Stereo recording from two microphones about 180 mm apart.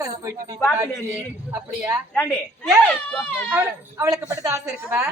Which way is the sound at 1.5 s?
10° right (ahead or behind).